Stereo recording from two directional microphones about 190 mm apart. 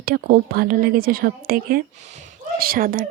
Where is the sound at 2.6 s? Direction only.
50° right (ahead or behind).